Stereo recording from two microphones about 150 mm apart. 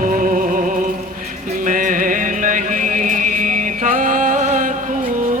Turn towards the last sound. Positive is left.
turn(degrees=-60)  # may be behind; listen again after turning